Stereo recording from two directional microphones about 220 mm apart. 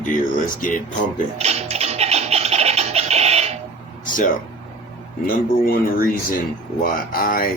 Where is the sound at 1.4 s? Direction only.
30° right (ahead or behind).